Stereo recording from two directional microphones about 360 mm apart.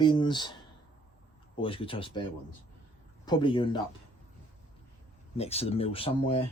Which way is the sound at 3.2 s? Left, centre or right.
Centre.